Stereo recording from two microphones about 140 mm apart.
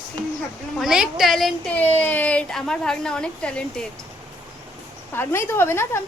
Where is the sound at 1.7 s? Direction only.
15° left (ahead or behind).